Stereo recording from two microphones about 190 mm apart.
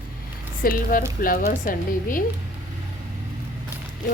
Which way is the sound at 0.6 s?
50° left (ahead or behind).